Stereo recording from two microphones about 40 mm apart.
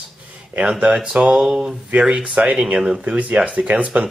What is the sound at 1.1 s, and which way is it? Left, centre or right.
Speech, right.